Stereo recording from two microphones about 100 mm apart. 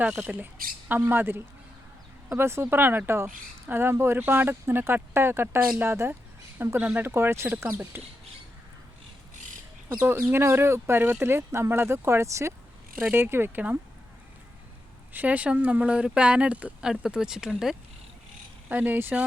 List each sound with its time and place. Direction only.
0.0 s speech: 10° right (ahead or behind)
10.0 s speech: 20° right (ahead or behind)
13.0 s speech: 20° right (ahead or behind)
15.1 s speech: 15° right (ahead or behind)
18.7 s speech: 20° right (ahead or behind)